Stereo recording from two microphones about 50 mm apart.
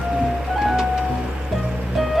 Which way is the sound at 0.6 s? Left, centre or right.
Centre.